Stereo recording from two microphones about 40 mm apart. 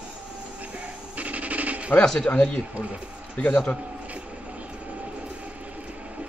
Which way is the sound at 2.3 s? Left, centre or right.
Left.